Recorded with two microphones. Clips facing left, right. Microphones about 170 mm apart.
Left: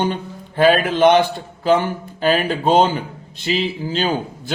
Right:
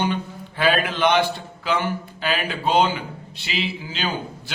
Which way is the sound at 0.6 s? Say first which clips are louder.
Left 7 dB; 45° left (ahead or behind).